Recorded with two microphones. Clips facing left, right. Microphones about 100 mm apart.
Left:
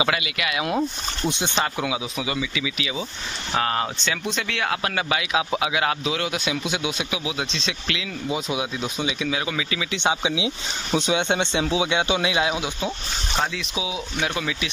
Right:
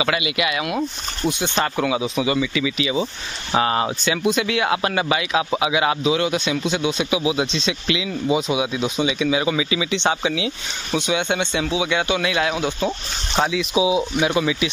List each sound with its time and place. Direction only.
1.6 s speech: 5° left (ahead or behind)
7.1 s speech: 5° right (ahead or behind)
9.9 s speech: 10° left (ahead or behind)
11.0 s speech: 30° left (ahead or behind)
12.5 s speech: 10° left (ahead or behind)
13.4 s speech: 5° right (ahead or behind)
13.7 s speech: 15° right (ahead or behind)